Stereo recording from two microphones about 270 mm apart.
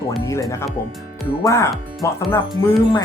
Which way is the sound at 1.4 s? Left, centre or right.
Centre.